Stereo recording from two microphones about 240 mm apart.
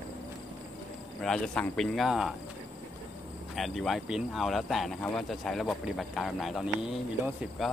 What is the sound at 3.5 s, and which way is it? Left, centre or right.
Speech, centre.